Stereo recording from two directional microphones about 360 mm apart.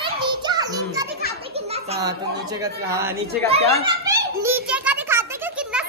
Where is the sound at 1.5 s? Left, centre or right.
Centre.